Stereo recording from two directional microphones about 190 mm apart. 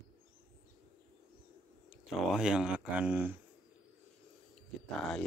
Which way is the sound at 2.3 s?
5° right (ahead or behind).